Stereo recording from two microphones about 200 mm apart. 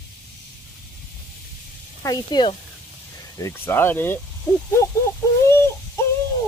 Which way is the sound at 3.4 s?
10° left (ahead or behind).